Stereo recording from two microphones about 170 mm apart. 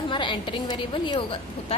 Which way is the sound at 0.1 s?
30° left (ahead or behind).